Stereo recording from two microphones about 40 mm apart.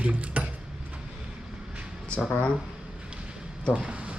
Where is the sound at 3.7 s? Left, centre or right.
Right.